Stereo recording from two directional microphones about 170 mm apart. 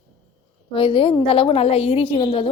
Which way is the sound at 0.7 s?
30° left (ahead or behind).